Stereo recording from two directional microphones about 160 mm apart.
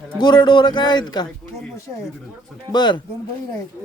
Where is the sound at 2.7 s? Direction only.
25° left (ahead or behind).